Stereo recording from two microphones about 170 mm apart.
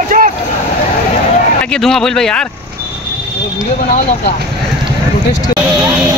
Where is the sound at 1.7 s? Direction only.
5° left (ahead or behind).